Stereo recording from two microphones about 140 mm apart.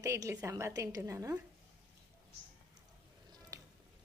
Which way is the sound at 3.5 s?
25° right (ahead or behind).